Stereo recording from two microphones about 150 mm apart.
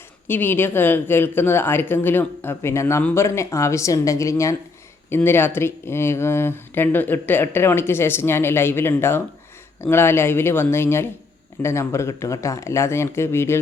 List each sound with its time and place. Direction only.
0.3 s a woman's voice: 15° left (ahead or behind)